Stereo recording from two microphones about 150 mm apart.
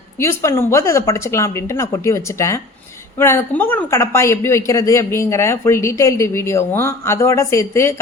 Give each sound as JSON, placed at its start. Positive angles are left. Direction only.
{"t": 0.2, "sound": "speech", "side_deg": 20}